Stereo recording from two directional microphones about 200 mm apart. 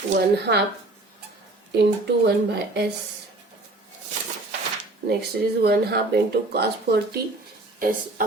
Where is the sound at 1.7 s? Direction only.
60° right (ahead or behind).